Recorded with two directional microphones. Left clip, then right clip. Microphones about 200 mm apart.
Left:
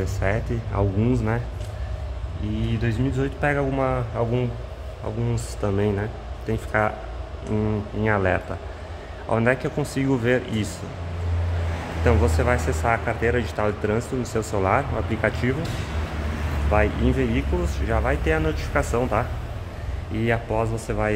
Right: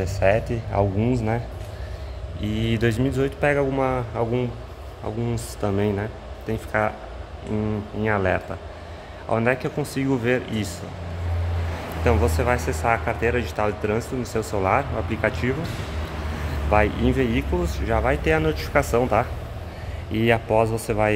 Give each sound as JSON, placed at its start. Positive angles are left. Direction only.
{"t": 0.0, "sound": "speech", "side_deg": -10}
{"t": 2.6, "sound": "speech", "side_deg": -30}
{"t": 3.2, "sound": "speech", "side_deg": -10}
{"t": 12.0, "sound": "speech", "side_deg": 0}
{"t": 16.7, "sound": "speech", "side_deg": -10}